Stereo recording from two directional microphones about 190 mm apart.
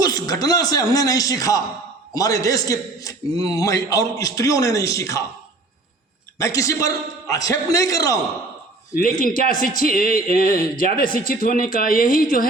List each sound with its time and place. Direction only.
0.0 s a man's voice: 20° left (ahead or behind)
6.4 s a man's voice: 15° left (ahead or behind)
9.2 s a woman's voice: 45° left (ahead or behind)